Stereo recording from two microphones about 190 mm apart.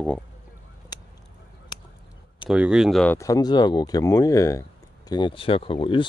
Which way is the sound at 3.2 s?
20° left (ahead or behind).